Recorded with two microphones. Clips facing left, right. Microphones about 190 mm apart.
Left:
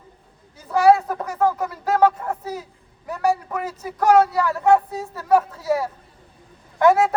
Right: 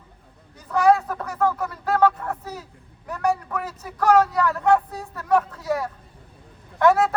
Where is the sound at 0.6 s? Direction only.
5° left (ahead or behind).